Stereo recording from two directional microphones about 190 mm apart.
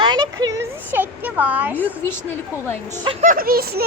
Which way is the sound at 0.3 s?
15° right (ahead or behind).